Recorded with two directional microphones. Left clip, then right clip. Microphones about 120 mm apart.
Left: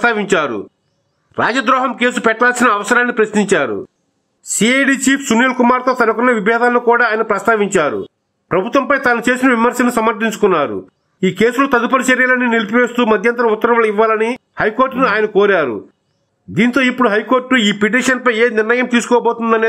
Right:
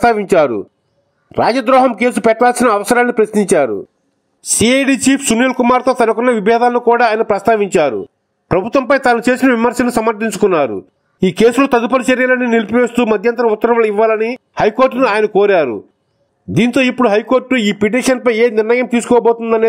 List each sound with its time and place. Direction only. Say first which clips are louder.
0.0 s speech: right 3 dB; 40° right (ahead or behind)